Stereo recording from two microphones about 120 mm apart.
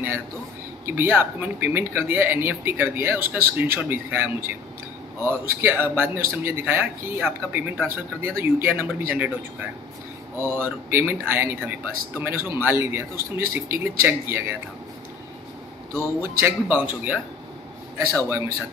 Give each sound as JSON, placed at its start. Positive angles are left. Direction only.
{"t": 0.8, "sound": "speech", "side_deg": -20}
{"t": 15.9, "sound": "speech", "side_deg": -20}